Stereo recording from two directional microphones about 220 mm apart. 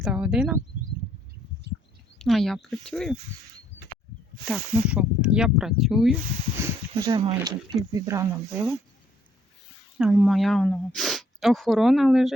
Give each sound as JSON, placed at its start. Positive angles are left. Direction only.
{"t": 0.0, "sound": "speech", "side_deg": -5}
{"t": 2.1, "sound": "speech", "side_deg": 0}
{"t": 4.4, "sound": "speech", "side_deg": -5}
{"t": 7.0, "sound": "speech", "side_deg": -20}
{"t": 10.0, "sound": "speech", "side_deg": 0}